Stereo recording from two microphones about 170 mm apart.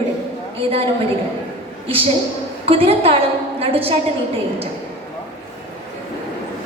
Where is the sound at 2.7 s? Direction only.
35° right (ahead or behind).